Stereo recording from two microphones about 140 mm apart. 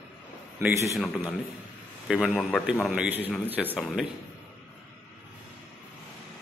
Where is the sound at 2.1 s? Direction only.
5° right (ahead or behind).